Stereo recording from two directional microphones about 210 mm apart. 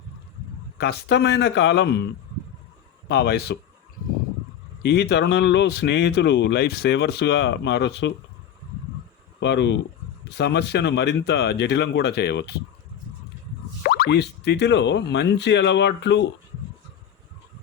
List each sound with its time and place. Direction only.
0.8 s speech: 50° left (ahead or behind)
3.1 s speech: 50° left (ahead or behind)
4.8 s speech: 50° left (ahead or behind)
9.4 s speech: 55° left (ahead or behind)
13.8 s speech: 45° left (ahead or behind)